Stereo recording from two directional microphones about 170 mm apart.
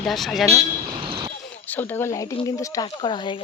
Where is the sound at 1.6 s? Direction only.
10° left (ahead or behind); by 3.3 s 30° left (ahead or behind).